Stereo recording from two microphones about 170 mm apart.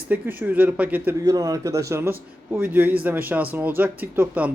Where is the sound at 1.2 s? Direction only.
20° right (ahead or behind).